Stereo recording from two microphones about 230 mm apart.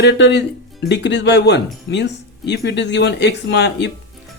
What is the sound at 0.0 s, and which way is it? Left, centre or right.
Speech, left.